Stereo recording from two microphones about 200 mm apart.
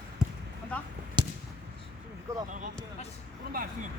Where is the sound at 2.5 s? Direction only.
40° right (ahead or behind).